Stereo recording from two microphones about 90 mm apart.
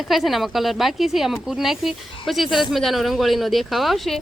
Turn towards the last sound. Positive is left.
turn(degrees=0)  # may be behind; listen again after turning